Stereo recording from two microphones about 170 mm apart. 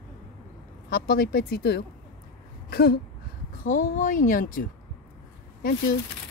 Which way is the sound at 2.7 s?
65° left (ahead or behind).